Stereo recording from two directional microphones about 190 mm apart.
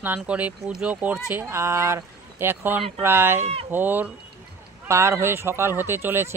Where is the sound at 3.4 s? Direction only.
30° right (ahead or behind).